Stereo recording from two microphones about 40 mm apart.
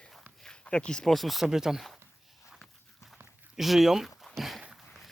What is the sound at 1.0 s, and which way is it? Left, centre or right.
Speech, centre.